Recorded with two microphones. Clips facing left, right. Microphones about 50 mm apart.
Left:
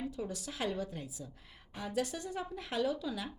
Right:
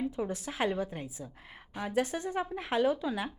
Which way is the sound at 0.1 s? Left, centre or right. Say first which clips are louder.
Right 5 dB; right.